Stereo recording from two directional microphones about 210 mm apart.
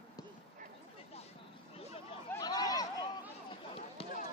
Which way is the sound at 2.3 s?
20° left (ahead or behind).